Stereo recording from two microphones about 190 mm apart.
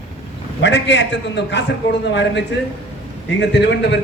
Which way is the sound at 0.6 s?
70° left (ahead or behind).